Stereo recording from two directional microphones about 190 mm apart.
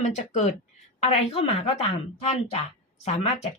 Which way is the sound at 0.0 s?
35° left (ahead or behind).